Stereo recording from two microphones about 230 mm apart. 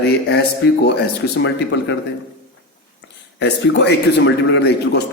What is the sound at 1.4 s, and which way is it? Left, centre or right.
Speech, left.